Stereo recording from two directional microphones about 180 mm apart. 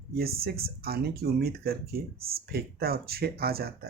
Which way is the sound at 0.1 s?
60° right (ahead or behind).